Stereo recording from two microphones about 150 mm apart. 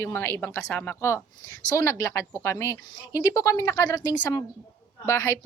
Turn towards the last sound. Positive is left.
turn(degrees=20)  # may be behind; listen again after turning